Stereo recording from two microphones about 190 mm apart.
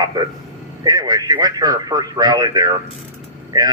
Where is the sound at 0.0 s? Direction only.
20° right (ahead or behind).